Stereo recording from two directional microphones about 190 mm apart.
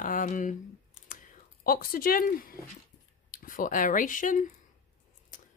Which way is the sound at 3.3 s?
45° left (ahead or behind).